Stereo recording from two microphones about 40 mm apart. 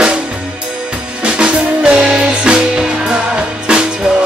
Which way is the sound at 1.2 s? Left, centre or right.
Right.